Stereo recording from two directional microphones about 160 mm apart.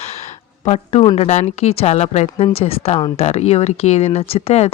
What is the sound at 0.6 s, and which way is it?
Speech, 40° left (ahead or behind).